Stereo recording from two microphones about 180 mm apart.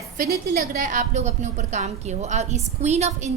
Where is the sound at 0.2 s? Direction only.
55° right (ahead or behind).